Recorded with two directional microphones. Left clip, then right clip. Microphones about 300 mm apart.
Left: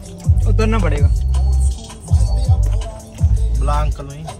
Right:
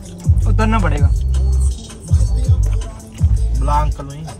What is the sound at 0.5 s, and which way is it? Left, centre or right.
Music, centre.